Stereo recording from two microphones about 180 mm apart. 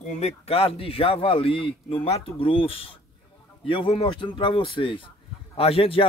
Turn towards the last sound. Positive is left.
turn(degrees=30)  # may be behind; listen again after turning